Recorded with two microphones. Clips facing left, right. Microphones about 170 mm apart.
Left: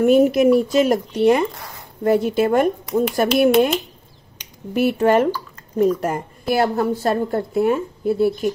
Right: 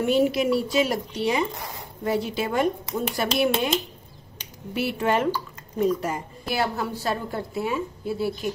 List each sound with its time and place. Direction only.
0.0 s a woman's voice: 50° left (ahead or behind)
4.7 s a woman's voice: 45° left (ahead or behind)